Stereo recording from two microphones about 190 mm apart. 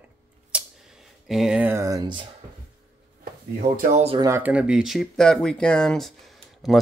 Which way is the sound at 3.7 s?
35° right (ahead or behind).